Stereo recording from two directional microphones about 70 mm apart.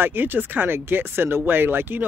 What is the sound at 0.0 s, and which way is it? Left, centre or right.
Speech, right.